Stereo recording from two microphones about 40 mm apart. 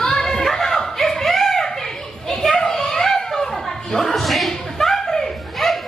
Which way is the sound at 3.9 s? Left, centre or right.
Centre.